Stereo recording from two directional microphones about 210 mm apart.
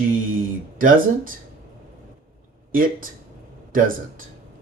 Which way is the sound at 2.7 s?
40° right (ahead or behind).